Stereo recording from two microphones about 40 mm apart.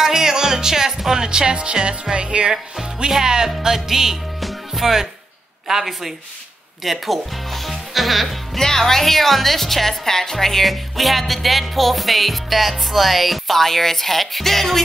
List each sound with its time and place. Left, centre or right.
0.0 s music: centre
2.1 s speech: right
3.1 s music: centre
4.4 s music: centre
5.7 s a woman's voice: centre
8.5 s a woman's voice: centre